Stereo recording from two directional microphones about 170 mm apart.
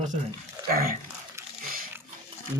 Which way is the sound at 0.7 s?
60° right (ahead or behind).